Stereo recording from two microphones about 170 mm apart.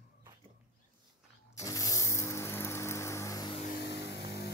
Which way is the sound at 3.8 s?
90° left.